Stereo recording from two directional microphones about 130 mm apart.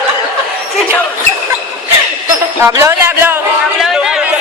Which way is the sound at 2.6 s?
20° right (ahead or behind).